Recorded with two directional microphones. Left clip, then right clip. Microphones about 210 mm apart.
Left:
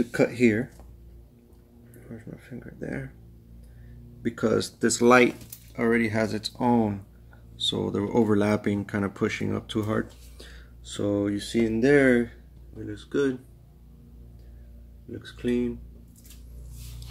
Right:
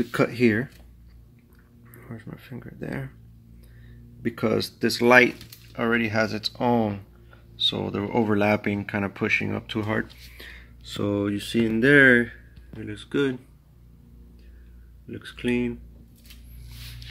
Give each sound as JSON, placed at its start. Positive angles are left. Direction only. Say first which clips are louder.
{"t": 0.1, "sound": "speech", "louder": "right 1 dB", "side_deg": -20}
{"t": 2.0, "sound": "speech", "louder": "right 1 dB", "side_deg": -20}
{"t": 4.7, "sound": "speech", "louder": "right 2 dB", "side_deg": -5}
{"t": 11.0, "sound": "speech", "louder": "even", "side_deg": -20}
{"t": 15.0, "sound": "speech", "louder": "right 2 dB", "side_deg": -35}